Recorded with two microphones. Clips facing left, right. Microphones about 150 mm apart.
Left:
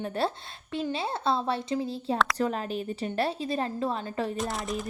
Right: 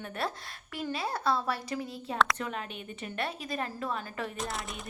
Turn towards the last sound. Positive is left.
turn(degrees=0)  # may be behind; listen again after turning